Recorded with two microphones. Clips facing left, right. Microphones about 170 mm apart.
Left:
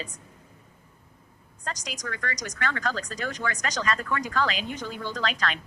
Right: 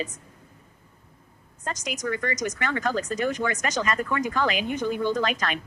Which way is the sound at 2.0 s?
20° right (ahead or behind).